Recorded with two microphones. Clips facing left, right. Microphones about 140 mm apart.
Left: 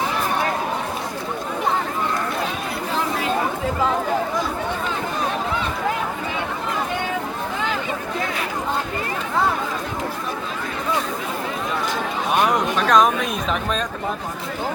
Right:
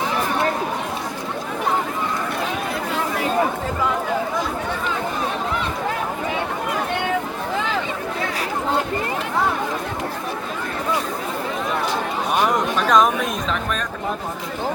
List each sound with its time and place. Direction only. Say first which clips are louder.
12.8 s chatter: even; centre (ahead or behind)
13.5 s speech: left 1 dB; 20° left (ahead or behind)